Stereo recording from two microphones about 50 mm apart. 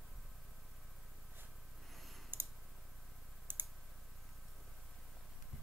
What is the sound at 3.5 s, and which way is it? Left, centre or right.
Clicking, right.